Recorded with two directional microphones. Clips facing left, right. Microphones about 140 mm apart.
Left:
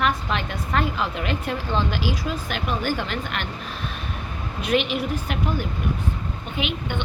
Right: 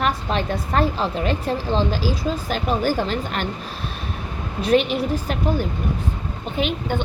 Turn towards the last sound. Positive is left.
turn(degrees=-40)  # may be behind; listen again after turning